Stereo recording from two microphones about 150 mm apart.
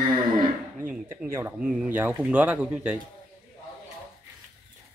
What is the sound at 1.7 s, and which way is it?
Speech, 10° right (ahead or behind).